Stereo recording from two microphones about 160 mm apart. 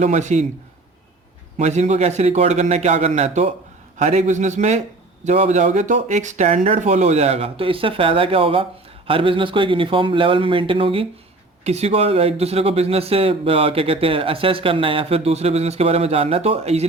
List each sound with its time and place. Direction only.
0.0 s speech: 45° right (ahead or behind)
1.5 s speech: 45° right (ahead or behind)